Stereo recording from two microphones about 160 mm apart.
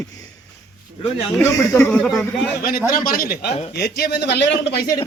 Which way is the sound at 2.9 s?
65° left (ahead or behind).